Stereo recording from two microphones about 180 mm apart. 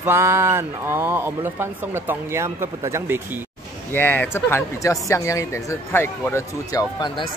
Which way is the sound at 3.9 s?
10° left (ahead or behind).